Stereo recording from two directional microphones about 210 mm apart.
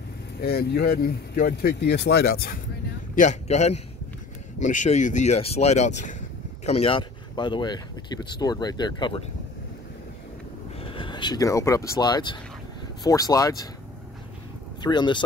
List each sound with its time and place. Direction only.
0.4 s speech: 50° left (ahead or behind)
3.2 s speech: 35° left (ahead or behind)
10.8 s speech: 25° left (ahead or behind)
14.8 s speech: 20° left (ahead or behind)